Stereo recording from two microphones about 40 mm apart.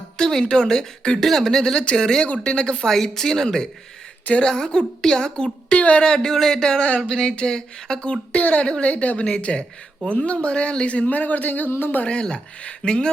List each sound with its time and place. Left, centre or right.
0.2 s a woman's voice: centre
2.9 s speech: centre
5.7 s speech: left
6.1 s speech: centre
8.4 s a man's voice: left
8.6 s speech: left
8.9 s a man's voice: left
12.0 s speech: left